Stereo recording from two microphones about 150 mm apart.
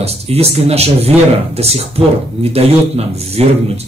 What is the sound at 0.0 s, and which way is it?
Speech, 45° right (ahead or behind).